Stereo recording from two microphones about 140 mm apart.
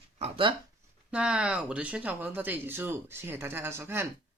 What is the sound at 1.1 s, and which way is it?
Speech, 5° right (ahead or behind).